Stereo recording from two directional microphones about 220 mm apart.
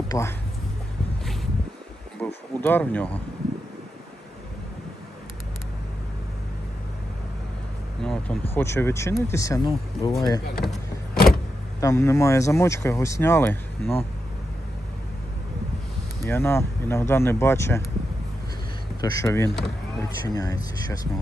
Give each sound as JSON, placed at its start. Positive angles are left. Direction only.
{"t": 0.1, "sound": "speech", "side_deg": 15}
{"t": 2.2, "sound": "a sound", "side_deg": 10}
{"t": 8.0, "sound": "speech", "side_deg": 5}
{"t": 10.6, "sound": "vehicle", "side_deg": 0}
{"t": 11.8, "sound": "speech", "side_deg": 15}
{"t": 16.2, "sound": "speech", "side_deg": 10}
{"t": 19.1, "sound": "speech", "side_deg": 15}